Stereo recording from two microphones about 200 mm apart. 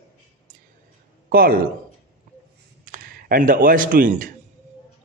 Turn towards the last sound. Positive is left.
turn(degrees=-40)  # may be behind; listen again after turning